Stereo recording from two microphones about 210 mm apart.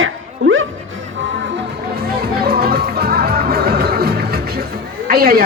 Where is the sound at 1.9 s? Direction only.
50° right (ahead or behind).